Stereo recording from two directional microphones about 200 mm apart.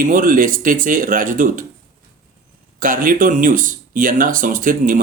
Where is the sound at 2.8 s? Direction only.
45° right (ahead or behind).